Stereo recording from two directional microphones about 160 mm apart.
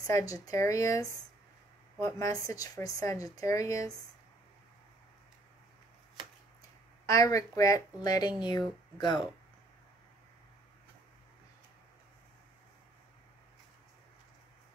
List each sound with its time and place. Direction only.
0.0 s speech: 20° left (ahead or behind)
7.1 s speech: 20° left (ahead or behind)